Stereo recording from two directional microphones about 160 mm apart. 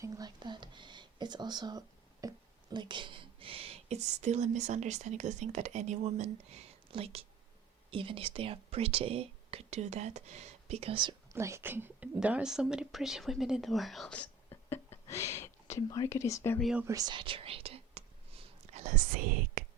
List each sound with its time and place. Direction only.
0.0 s speech: 25° right (ahead or behind)
11.3 s speech: 15° right (ahead or behind); by 14.2 s centre (ahead or behind)
14.5 s a sound: 15° left (ahead or behind)
15.6 s speech: 20° left (ahead or behind)
16.6 s speech: centre (ahead or behind)
16.8 s whispering: 20° right (ahead or behind); by 19.6 s 60° right (ahead or behind)